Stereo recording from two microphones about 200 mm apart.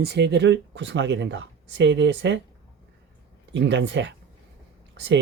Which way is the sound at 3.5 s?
60° right (ahead or behind).